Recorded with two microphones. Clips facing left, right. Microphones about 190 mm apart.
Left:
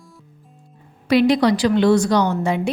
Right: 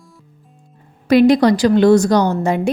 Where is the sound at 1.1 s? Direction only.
45° right (ahead or behind).